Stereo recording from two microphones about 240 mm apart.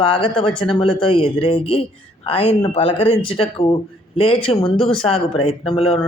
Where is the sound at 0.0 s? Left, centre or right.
Left.